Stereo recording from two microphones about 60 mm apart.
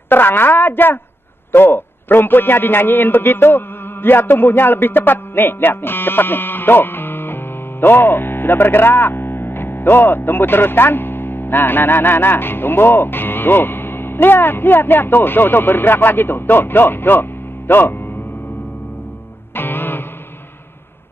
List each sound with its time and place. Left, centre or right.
0.1 s a man's voice: left
19.5 s music: left